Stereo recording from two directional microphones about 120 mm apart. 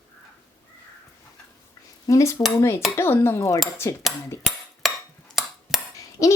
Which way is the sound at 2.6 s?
20° left (ahead or behind).